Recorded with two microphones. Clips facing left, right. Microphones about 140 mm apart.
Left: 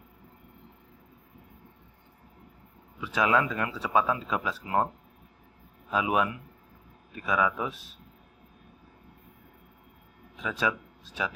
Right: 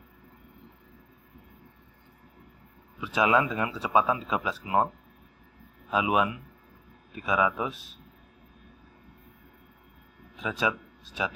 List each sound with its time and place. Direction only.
3.0 s speech: 15° right (ahead or behind)
5.9 s speech: 15° right (ahead or behind)
10.6 s a man's voice: 20° right (ahead or behind)